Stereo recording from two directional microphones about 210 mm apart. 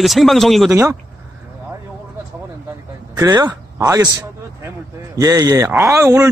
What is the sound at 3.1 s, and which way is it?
Speech, 20° right (ahead or behind).